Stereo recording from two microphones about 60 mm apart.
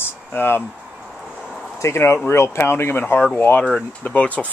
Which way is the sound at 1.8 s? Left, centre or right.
Left.